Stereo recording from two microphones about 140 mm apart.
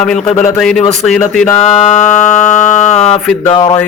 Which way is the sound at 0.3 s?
50° left (ahead or behind).